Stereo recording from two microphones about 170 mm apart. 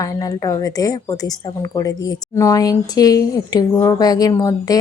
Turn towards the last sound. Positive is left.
turn(degrees=20)  # may be behind; listen again after turning